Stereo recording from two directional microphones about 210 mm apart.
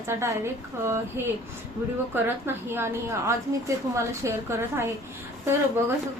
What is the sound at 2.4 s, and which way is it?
Speech, 10° right (ahead or behind).